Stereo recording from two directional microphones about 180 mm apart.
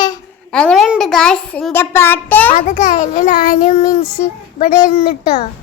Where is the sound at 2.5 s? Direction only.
45° left (ahead or behind).